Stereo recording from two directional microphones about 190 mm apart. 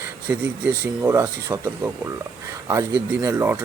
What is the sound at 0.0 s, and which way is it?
Speech, 10° right (ahead or behind).